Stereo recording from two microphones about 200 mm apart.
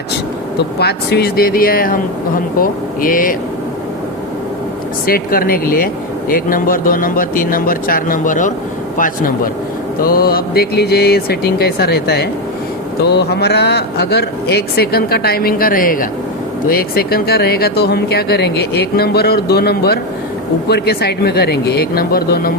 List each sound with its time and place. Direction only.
0.8 s speech: 55° left (ahead or behind)
5.0 s speech: 45° left (ahead or behind)